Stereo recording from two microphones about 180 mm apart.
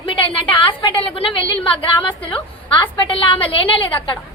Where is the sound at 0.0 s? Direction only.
30° left (ahead or behind).